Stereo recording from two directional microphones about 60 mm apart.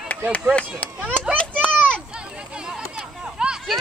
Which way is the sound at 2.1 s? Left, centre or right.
Centre.